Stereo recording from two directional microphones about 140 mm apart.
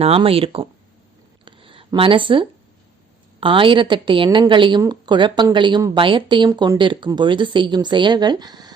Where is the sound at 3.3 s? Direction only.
40° right (ahead or behind).